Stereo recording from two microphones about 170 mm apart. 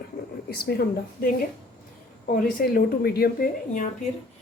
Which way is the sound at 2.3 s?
60° left (ahead or behind).